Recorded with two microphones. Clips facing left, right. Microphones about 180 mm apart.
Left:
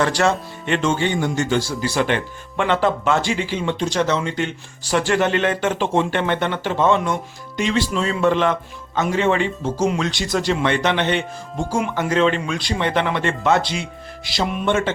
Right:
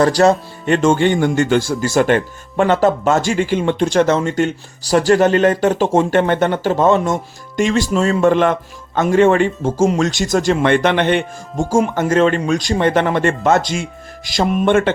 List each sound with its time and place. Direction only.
0.0 s speech: 40° right (ahead or behind); by 14.9 s 55° right (ahead or behind)